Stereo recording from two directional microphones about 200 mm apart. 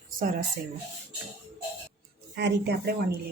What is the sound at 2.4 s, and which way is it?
Speech, 55° right (ahead or behind).